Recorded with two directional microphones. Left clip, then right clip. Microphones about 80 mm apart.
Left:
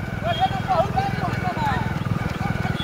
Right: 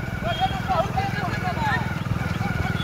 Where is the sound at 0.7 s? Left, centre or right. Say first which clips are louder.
Left 2 dB; centre.